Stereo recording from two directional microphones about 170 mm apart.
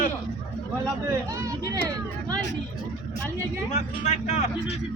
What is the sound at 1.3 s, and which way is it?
Speech, 20° right (ahead or behind).